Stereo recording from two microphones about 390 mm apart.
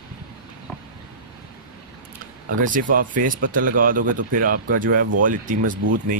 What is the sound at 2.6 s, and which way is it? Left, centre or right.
Speech, centre.